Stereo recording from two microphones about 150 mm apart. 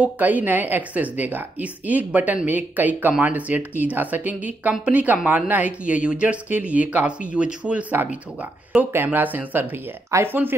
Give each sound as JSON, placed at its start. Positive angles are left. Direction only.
{"t": 0.0, "sound": "a woman's voice", "side_deg": -10}